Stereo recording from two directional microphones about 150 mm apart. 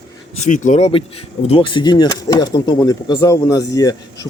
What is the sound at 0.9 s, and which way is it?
Speech, 40° left (ahead or behind).